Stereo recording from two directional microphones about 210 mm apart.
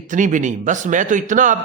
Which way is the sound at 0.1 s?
35° right (ahead or behind).